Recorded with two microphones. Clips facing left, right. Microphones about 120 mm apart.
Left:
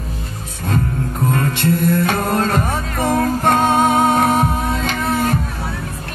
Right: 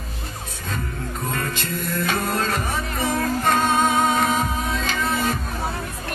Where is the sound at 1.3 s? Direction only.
60° left (ahead or behind).